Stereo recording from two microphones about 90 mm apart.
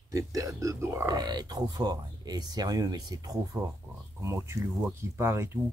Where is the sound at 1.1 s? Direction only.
50° right (ahead or behind).